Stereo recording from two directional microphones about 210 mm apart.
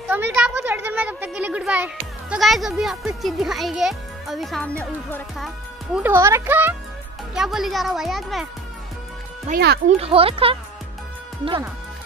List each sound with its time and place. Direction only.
0.1 s a child's voice: 10° right (ahead or behind); by 5.5 s 5° left (ahead or behind)
5.9 s speech: 10° right (ahead or behind)
9.5 s speech: 50° right (ahead or behind)
9.8 s speech: 30° right (ahead or behind)